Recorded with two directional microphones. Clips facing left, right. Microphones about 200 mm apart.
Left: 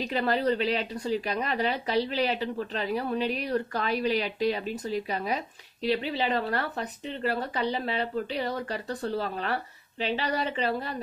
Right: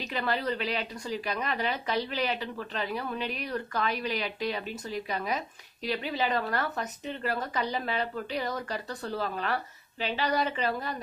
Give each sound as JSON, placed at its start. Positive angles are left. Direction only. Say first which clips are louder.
{"t": 0.0, "sound": "speech", "louder": "left 5 dB", "side_deg": 35}